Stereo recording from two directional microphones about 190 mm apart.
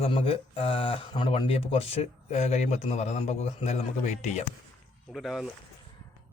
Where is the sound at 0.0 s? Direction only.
30° left (ahead or behind).